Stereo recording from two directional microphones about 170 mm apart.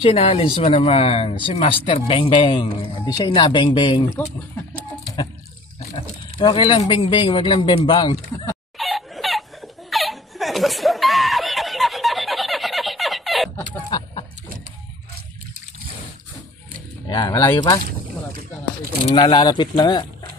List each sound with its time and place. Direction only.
0.0 s speech: 35° left (ahead or behind)
6.5 s speech: 30° left (ahead or behind)
8.7 s laughter: centre (ahead or behind)
13.8 s chicken: 30° left (ahead or behind)
17.1 s speech: 20° left (ahead or behind)
19.1 s speech: 25° left (ahead or behind)